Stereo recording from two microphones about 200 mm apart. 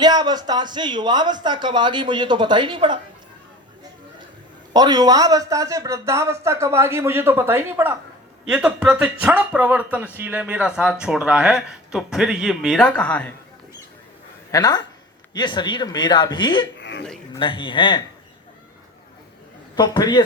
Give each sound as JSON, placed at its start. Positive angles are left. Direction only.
{"t": 0.0, "sound": "speech", "side_deg": -20}
{"t": 4.7, "sound": "a man's voice", "side_deg": -20}
{"t": 14.5, "sound": "a man's voice", "side_deg": 20}
{"t": 16.8, "sound": "a sound", "side_deg": 65}
{"t": 17.3, "sound": "a man's voice", "side_deg": 25}
{"t": 19.7, "sound": "a man's voice", "side_deg": 20}